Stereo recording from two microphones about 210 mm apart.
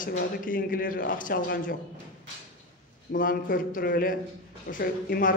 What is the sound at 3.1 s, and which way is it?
A man's voice, 40° left (ahead or behind).